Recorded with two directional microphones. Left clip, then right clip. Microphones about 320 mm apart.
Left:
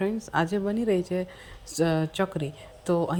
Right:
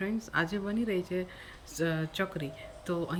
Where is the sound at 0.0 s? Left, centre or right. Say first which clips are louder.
Left 5 dB; centre.